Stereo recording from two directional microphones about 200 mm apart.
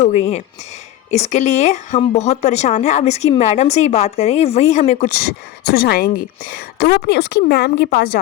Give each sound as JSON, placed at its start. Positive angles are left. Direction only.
{"t": 0.0, "sound": "speech", "side_deg": 35}